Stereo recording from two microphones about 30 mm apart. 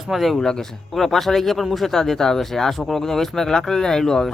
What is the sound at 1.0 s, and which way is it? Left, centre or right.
Speech, centre.